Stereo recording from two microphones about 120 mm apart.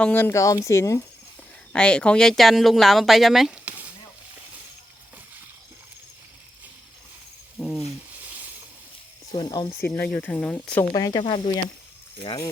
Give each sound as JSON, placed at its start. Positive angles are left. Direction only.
{"t": 0.0, "sound": "speech", "side_deg": 15}
{"t": 1.7, "sound": "speech", "side_deg": 10}
{"t": 7.6, "sound": "a sound", "side_deg": 0}
{"t": 9.3, "sound": "speech", "side_deg": 35}
{"t": 9.8, "sound": "speech", "side_deg": 15}
{"t": 10.9, "sound": "speech", "side_deg": 30}
{"t": 11.2, "sound": "speech", "side_deg": 45}